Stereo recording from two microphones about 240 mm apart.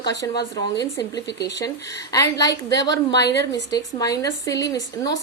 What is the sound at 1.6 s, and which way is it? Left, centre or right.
A woman's voice, centre.